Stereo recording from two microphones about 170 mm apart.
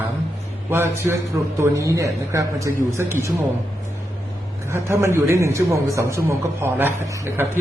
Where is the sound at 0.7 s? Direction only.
15° right (ahead or behind).